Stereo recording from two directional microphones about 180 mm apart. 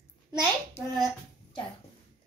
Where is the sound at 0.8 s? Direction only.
35° left (ahead or behind).